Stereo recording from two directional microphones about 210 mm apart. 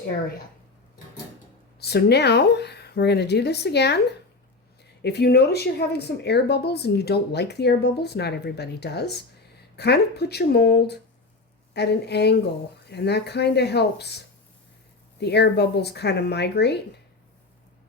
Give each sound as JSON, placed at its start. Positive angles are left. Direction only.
{"t": 1.8, "sound": "speech", "side_deg": 50}
{"t": 5.0, "sound": "speech", "side_deg": 50}